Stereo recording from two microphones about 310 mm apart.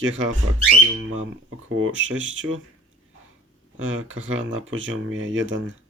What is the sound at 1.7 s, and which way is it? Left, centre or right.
Speech, right.